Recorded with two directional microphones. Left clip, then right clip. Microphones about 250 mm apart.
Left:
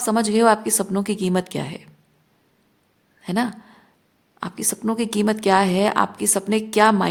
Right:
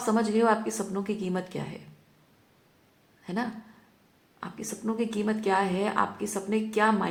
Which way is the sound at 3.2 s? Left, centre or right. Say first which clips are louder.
Left 9 dB; left.